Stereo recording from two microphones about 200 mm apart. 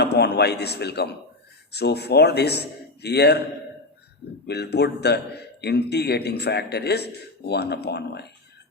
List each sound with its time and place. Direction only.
0.0 s a man's voice: 55° left (ahead or behind)
4.4 s a man's voice: 55° left (ahead or behind)